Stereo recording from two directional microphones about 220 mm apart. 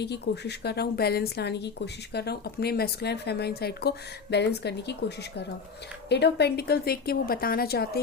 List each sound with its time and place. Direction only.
0.0 s a woman's voice: 50° left (ahead or behind)